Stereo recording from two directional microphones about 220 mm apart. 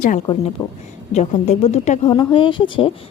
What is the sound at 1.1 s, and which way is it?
Speech, 30° left (ahead or behind).